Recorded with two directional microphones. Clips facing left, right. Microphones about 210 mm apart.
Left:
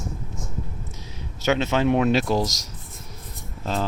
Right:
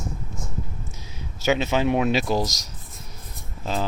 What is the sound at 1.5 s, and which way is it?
Speech, 5° right (ahead or behind).